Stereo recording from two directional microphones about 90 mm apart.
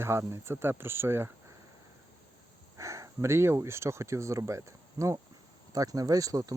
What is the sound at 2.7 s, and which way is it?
Speech, 35° right (ahead or behind).